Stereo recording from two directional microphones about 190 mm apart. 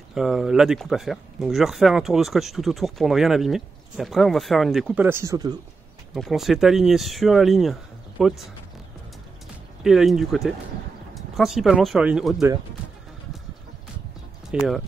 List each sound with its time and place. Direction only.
0.1 s speech: centre (ahead or behind); by 5.6 s 20° right (ahead or behind)
6.1 s speech: centre (ahead or behind)
9.8 s speech: centre (ahead or behind)
14.5 s speech: 5° right (ahead or behind)